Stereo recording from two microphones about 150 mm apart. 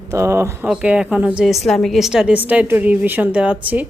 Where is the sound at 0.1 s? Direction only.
20° right (ahead or behind).